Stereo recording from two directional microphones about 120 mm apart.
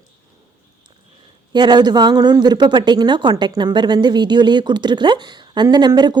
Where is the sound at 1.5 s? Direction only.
35° right (ahead or behind).